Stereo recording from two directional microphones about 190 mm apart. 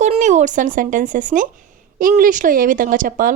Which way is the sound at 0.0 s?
40° right (ahead or behind).